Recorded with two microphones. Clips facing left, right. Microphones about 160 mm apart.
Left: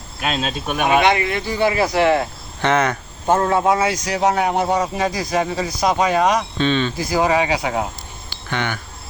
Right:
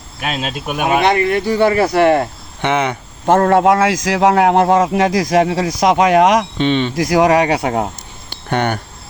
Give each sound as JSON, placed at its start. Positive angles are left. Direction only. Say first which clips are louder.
{"t": 0.2, "sound": "speech", "louder": "right 1 dB", "side_deg": -5}
{"t": 1.0, "sound": "speech", "louder": "right 4 dB", "side_deg": -45}
{"t": 2.6, "sound": "speech", "louder": "right 1 dB", "side_deg": -15}
{"t": 3.2, "sound": "a man's voice", "louder": "right 5 dB", "side_deg": -70}
{"t": 6.6, "sound": "speech", "louder": "right 3 dB", "side_deg": -25}
{"t": 6.9, "sound": "speech", "louder": "right 6 dB", "side_deg": -85}
{"t": 7.6, "sound": "speech", "louder": "right 4 dB", "side_deg": -45}